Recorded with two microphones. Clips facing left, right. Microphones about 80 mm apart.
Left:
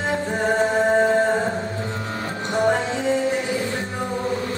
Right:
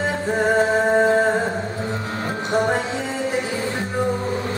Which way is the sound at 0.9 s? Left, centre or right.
Centre.